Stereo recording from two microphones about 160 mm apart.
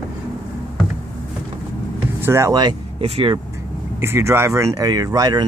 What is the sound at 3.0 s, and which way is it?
Speech, 35° right (ahead or behind).